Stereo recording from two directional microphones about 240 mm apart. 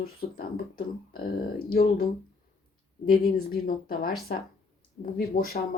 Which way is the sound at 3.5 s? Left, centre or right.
Left.